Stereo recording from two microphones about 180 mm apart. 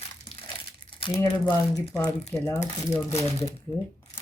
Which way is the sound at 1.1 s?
15° left (ahead or behind).